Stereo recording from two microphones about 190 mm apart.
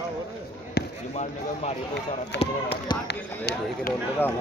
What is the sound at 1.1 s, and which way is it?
Speech, 35° left (ahead or behind).